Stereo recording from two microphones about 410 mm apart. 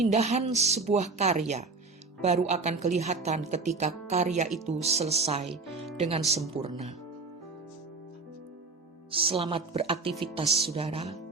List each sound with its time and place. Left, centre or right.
0.0 s music: centre
9.1 s music: centre